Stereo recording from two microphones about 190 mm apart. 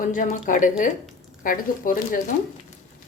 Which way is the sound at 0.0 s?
45° left (ahead or behind).